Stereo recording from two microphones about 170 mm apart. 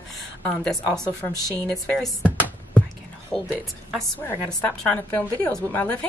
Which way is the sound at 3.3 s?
Centre (ahead or behind).